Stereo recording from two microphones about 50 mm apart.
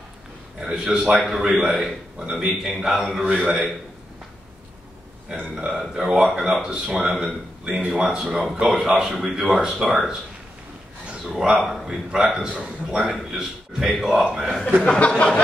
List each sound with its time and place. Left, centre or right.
0.6 s a man's voice: centre
5.3 s a man's voice: right; by 7.3 s centre
7.6 s a man's voice: centre
11.3 s a man's voice: centre
13.0 s a man's voice: centre
14.8 s a sound: left